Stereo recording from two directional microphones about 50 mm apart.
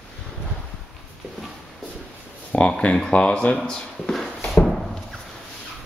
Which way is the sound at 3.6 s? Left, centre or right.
Centre.